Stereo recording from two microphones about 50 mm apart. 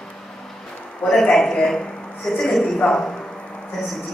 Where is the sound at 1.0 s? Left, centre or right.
Centre.